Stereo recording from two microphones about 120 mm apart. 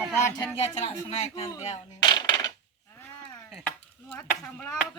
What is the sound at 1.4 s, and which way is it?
Coin, 30° left (ahead or behind).